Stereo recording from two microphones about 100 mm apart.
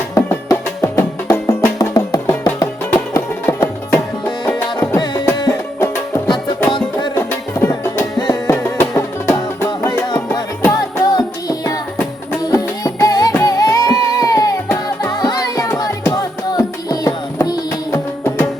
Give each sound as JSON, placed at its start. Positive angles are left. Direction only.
{"t": 0.1, "sound": "music", "side_deg": 30}
{"t": 6.7, "sound": "music", "side_deg": 50}
{"t": 7.2, "sound": "music", "side_deg": 25}
{"t": 9.6, "sound": "music", "side_deg": 35}